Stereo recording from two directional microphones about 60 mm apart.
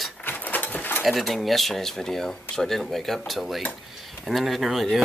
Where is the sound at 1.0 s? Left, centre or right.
Centre.